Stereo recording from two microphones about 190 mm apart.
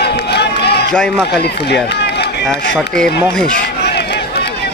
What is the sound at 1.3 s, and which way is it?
Speech, 60° left (ahead or behind).